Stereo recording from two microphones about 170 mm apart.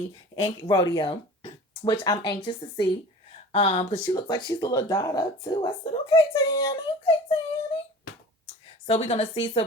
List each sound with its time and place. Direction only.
0.3 s speech: 30° left (ahead or behind)
8.9 s speech: 35° left (ahead or behind)